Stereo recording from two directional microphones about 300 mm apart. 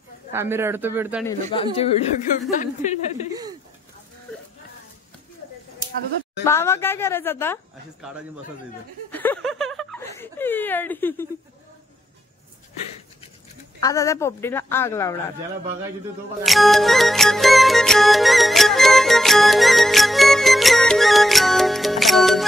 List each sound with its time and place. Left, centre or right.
0.3 s a man's voice: centre
1.2 s speech: centre
6.4 s speech: centre
9.1 s speech: centre
13.7 s speech: centre
16.4 s music: centre